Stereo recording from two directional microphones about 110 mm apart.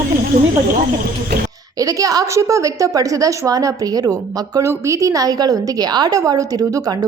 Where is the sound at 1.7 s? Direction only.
35° right (ahead or behind).